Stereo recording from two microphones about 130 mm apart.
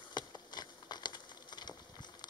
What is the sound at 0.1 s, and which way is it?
Patter, 35° left (ahead or behind).